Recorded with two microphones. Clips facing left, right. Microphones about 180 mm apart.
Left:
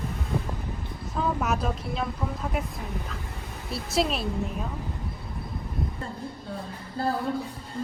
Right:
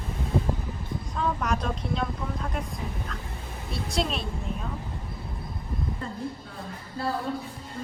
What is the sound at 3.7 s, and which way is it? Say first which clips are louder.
Speech: left 3 dB; 5° left (ahead or behind).